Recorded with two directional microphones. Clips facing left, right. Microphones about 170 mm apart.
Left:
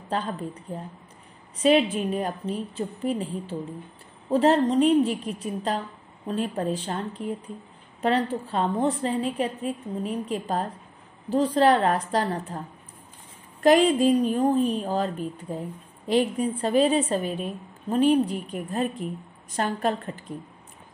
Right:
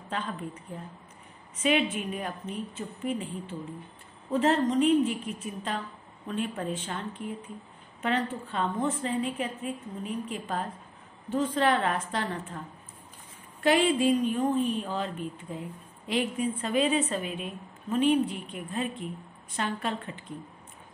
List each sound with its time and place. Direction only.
0.1 s a woman's voice: 35° left (ahead or behind)